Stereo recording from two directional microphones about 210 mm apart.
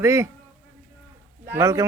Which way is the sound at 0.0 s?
15° right (ahead or behind).